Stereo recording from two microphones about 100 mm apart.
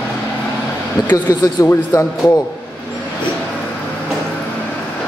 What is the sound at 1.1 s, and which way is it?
A man's voice, 40° left (ahead or behind).